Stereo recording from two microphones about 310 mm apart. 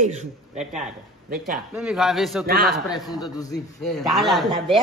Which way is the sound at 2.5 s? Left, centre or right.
Right.